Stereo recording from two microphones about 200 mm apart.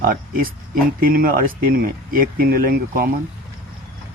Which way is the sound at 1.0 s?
45° right (ahead or behind).